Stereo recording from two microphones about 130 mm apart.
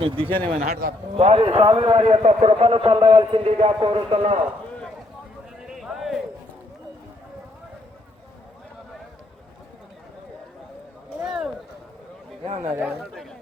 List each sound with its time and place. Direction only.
0.0 s a man's voice: 40° right (ahead or behind)
0.6 s a man's voice: 80° right
1.1 s a man's voice: 45° right (ahead or behind)
5.6 s clip-clop: centre (ahead or behind)
11.2 s a sound: centre (ahead or behind)
12.6 s speech: 20° right (ahead or behind)